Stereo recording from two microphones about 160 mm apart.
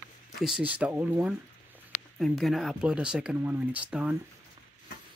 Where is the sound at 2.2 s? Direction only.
Centre (ahead or behind).